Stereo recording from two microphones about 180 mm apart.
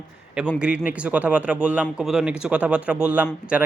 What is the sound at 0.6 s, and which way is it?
Speech, 5° right (ahead or behind).